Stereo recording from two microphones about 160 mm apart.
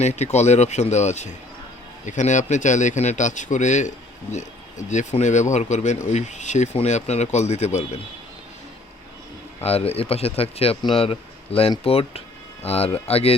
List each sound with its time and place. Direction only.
0.0 s speech: 45° left (ahead or behind)
9.6 s speech: 40° left (ahead or behind)